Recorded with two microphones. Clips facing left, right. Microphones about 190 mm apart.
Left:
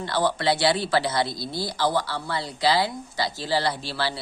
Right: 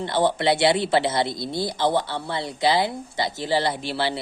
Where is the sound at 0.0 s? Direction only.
20° right (ahead or behind).